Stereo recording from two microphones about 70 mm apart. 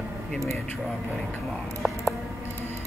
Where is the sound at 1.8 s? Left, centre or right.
Centre.